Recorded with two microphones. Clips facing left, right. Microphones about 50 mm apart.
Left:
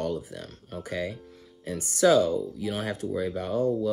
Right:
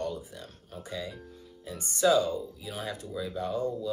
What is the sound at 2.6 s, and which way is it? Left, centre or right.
Speech, left.